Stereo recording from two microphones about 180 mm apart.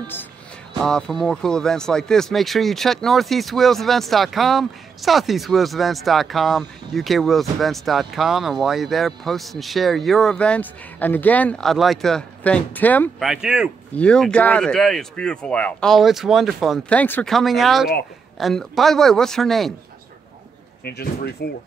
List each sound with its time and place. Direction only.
0.0 s speech: 10° left (ahead or behind)
13.3 s speech: 5° right (ahead or behind)
20.8 s speech: 60° left (ahead or behind)